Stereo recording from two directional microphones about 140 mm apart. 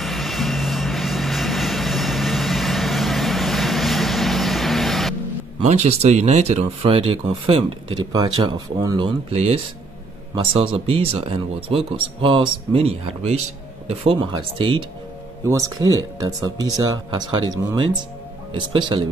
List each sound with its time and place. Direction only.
0.0 s vehicle: centre (ahead or behind)
5.7 s speech: 50° right (ahead or behind); by 9.1 s 30° right (ahead or behind)
9.3 s speech: 45° right (ahead or behind)
14.3 s speech: 35° right (ahead or behind)
15.8 s speech: 25° right (ahead or behind)